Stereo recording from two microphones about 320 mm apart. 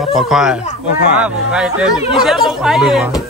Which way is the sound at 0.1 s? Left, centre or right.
Centre.